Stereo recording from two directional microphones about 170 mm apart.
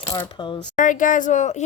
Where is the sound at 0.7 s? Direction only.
50° left (ahead or behind).